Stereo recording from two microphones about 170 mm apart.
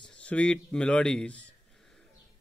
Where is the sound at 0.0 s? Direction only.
5° left (ahead or behind).